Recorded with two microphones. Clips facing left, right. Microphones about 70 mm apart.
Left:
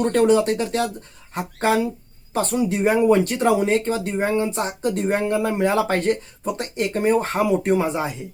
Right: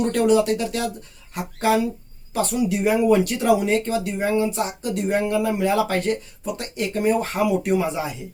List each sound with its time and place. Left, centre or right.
0.0 s speech: left